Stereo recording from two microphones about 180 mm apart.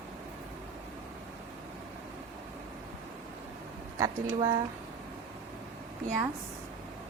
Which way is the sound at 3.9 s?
20° right (ahead or behind).